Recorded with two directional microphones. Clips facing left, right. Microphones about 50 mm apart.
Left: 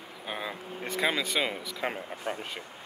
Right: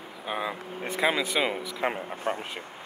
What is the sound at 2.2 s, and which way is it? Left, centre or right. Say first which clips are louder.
Speech: right 4 dB; right.